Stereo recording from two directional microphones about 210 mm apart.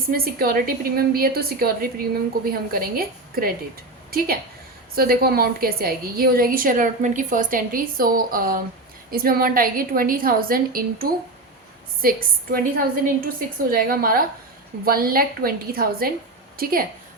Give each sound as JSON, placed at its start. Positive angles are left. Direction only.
{"t": 0.1, "sound": "a woman's voice", "side_deg": -45}